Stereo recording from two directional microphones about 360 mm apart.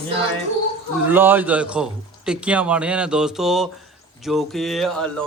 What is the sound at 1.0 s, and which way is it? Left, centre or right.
Speech, centre.